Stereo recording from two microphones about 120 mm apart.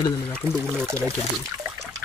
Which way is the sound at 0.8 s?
25° right (ahead or behind).